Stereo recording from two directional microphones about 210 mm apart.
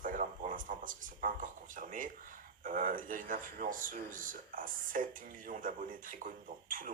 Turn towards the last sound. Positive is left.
turn(degrees=-40)  # may be behind; listen again after turning